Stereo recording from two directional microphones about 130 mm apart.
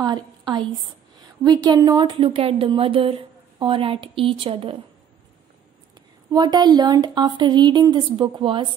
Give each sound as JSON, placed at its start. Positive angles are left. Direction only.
{"t": 0.0, "sound": "a woman's voice", "side_deg": -30}
{"t": 6.3, "sound": "a woman's voice", "side_deg": -35}